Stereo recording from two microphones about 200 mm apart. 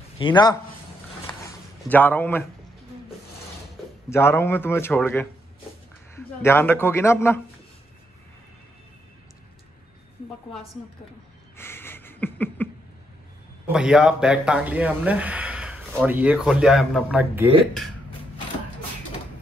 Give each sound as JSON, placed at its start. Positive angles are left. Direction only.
{"t": 0.2, "sound": "a man's voice", "side_deg": 20}
{"t": 1.9, "sound": "speech", "side_deg": 10}
{"t": 4.1, "sound": "speech", "side_deg": 10}
{"t": 11.5, "sound": "a sound", "side_deg": 10}
{"t": 13.7, "sound": "speech", "side_deg": -5}